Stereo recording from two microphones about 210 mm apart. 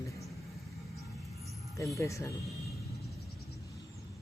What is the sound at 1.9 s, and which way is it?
Speech, 15° left (ahead or behind).